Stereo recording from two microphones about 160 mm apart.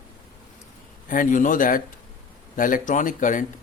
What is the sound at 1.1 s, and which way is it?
Speech, 55° left (ahead or behind).